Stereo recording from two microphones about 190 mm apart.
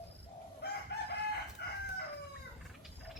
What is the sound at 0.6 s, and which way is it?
Chicken, 60° left (ahead or behind).